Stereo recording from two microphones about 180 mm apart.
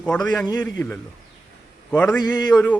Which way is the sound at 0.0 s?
5° left (ahead or behind).